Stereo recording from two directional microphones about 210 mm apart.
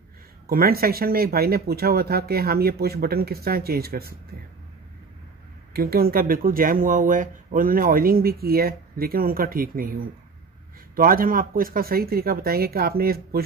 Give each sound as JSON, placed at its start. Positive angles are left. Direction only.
{"t": 0.5, "sound": "speech", "side_deg": -45}
{"t": 5.7, "sound": "speech", "side_deg": -45}